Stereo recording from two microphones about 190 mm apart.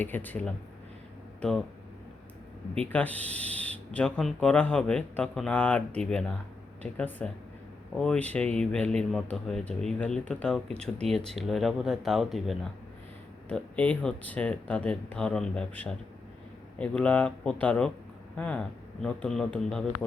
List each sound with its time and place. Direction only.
0.0 s speech: 10° left (ahead or behind)
2.7 s speech: 5° left (ahead or behind)